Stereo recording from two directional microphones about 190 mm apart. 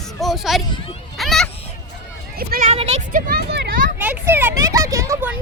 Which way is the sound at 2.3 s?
50° right (ahead or behind).